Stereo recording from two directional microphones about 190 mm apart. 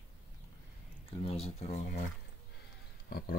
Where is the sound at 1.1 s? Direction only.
30° left (ahead or behind).